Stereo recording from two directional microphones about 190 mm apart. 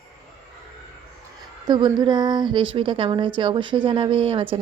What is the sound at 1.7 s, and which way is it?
A woman's voice, 20° right (ahead or behind).